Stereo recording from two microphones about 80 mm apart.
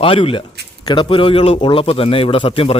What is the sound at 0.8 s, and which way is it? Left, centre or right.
Speech, left.